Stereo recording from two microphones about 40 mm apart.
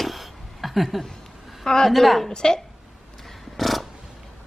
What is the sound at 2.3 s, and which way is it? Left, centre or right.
Speech, centre.